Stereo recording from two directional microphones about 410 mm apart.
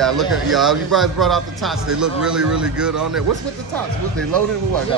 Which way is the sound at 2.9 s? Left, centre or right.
Right.